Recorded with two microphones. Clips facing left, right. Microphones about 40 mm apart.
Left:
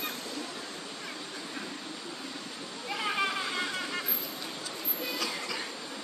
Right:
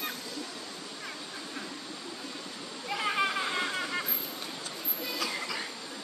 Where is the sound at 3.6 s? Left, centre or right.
Centre.